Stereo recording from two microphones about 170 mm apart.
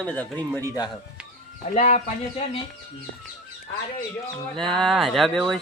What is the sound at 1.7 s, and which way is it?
Speech, 40° left (ahead or behind).